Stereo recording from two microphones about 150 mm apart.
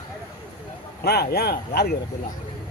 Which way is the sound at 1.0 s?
90° left.